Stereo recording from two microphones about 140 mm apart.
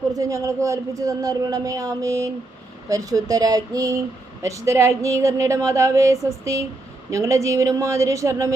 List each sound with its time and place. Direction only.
0.1 s a man's voice: 25° right (ahead or behind)